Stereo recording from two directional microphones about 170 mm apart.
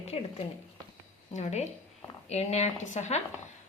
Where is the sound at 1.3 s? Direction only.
40° left (ahead or behind).